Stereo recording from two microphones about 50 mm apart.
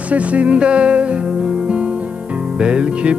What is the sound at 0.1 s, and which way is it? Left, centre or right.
Music, right.